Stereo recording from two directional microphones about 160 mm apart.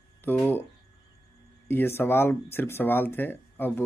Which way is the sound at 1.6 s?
15° left (ahead or behind).